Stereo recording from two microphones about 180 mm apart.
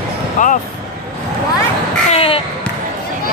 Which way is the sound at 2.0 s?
30° left (ahead or behind).